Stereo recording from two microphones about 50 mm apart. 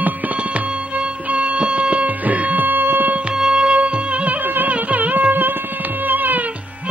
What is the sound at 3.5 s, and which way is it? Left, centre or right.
Music, right.